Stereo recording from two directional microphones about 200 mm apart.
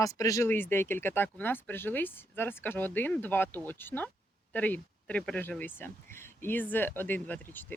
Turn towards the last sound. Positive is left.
turn(degrees=5)  # may be behind; listen again after turning